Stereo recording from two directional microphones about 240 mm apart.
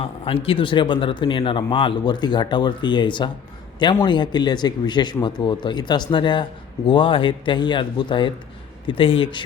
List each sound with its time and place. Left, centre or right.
0.0 s a man's voice: left